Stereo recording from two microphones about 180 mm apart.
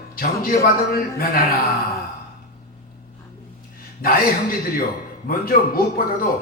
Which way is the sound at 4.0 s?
55° left (ahead or behind).